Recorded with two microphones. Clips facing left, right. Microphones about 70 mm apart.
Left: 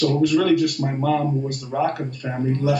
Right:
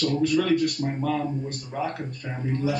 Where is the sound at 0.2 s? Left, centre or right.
Left.